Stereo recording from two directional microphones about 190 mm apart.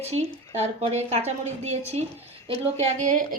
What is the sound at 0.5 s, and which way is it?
A woman's voice, 35° right (ahead or behind).